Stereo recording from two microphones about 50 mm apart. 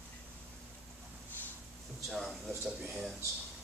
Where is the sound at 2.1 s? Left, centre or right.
Centre.